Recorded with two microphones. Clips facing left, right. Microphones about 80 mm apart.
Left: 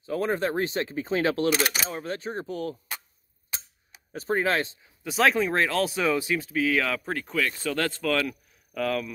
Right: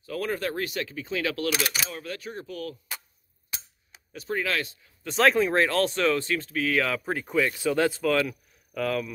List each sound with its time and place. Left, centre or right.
0.0 s speech: left
4.1 s speech: left
4.8 s speech: centre